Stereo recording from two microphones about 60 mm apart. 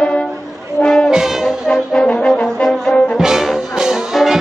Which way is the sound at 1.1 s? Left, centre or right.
Centre.